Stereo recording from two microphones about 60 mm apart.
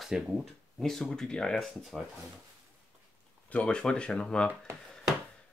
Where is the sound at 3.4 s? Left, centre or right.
Centre.